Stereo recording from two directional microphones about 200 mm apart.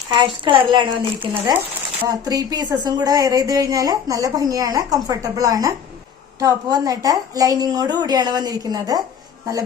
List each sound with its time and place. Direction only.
0.1 s a woman's voice: 25° right (ahead or behind)
1.2 s a woman's voice: 10° right (ahead or behind)